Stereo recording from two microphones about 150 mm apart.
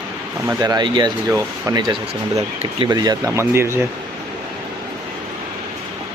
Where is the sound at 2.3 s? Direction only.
40° right (ahead or behind).